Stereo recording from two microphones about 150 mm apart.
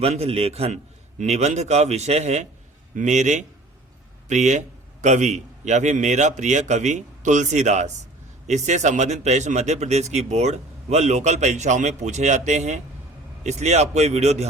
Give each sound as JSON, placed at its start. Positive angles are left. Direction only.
{"t": 0.0, "sound": "speech", "side_deg": -45}